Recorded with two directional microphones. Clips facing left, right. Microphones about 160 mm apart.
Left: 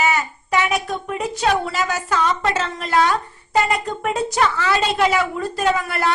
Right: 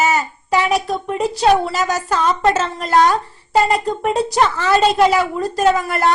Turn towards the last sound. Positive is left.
turn(degrees=-40)  # may be behind; listen again after turning